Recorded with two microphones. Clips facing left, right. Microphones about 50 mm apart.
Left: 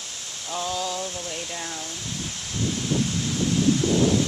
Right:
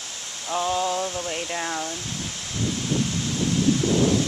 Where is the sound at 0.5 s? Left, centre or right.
Right.